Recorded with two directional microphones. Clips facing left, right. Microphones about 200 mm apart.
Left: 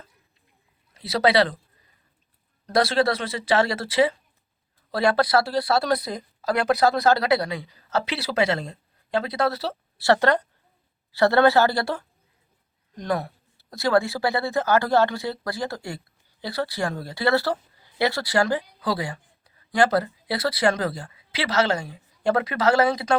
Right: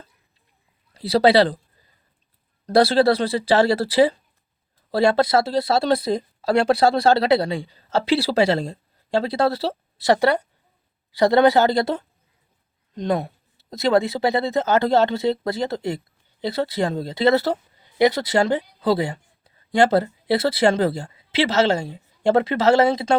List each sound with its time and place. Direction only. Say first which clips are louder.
0.9 s speech: right 5 dB; 30° right (ahead or behind)
2.6 s speech: right 5 dB; 30° right (ahead or behind)
10.0 s speech: right 2 dB; 15° right (ahead or behind)